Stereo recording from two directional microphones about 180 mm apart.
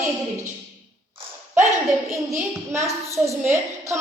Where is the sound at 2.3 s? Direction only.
15° right (ahead or behind).